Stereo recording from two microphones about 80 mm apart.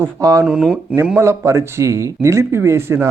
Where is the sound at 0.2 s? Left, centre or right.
Right.